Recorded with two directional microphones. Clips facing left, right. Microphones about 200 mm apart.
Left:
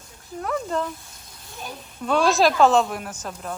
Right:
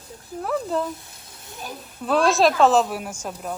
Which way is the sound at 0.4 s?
5° right (ahead or behind).